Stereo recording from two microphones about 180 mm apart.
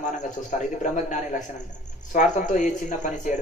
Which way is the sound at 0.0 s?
45° left (ahead or behind).